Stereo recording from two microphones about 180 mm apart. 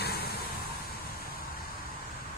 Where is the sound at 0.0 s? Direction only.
60° left (ahead or behind).